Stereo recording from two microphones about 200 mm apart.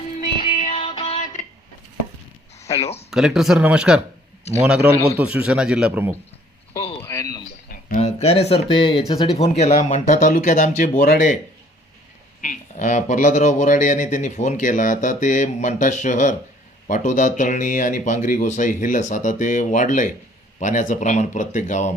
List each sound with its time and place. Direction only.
0.5 s music: 35° left (ahead or behind)
2.7 s speech: 30° left (ahead or behind)
3.1 s speech: centre (ahead or behind)
7.0 s a sound: 15° left (ahead or behind)
7.7 s speech: 40° left (ahead or behind)
12.4 s speech: 40° left (ahead or behind)